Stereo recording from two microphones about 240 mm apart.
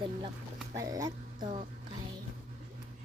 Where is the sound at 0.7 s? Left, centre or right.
Centre.